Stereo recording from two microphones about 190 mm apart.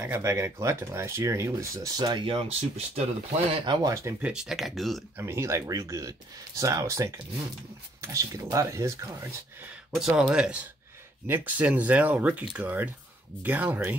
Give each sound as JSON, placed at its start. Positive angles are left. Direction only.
{"t": 0.0, "sound": "speech", "side_deg": -15}
{"t": 4.3, "sound": "speech", "side_deg": 0}
{"t": 5.1, "sound": "speech", "side_deg": -15}
{"t": 9.9, "sound": "speech", "side_deg": -5}